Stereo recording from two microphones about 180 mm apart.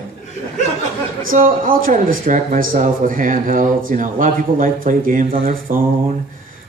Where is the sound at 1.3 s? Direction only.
50° right (ahead or behind).